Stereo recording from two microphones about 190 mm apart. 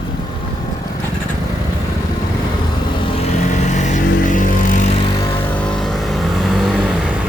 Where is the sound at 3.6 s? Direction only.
40° left (ahead or behind).